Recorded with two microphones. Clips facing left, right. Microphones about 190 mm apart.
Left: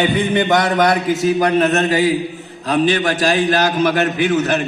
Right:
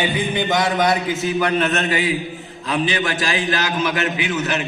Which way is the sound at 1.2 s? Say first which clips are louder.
Left 6 dB; 40° left (ahead or behind).